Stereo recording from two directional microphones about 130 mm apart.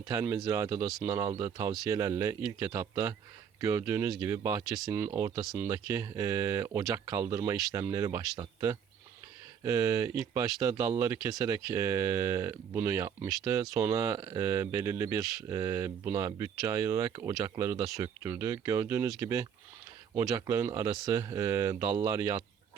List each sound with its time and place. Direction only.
0.0 s speech: 25° right (ahead or behind)
9.6 s speech: 25° right (ahead or behind)